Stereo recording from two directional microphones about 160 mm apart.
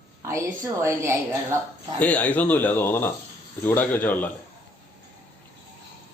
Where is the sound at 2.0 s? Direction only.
10° left (ahead or behind).